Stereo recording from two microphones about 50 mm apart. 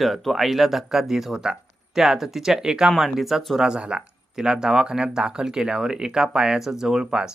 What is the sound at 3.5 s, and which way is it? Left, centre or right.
Speech, centre.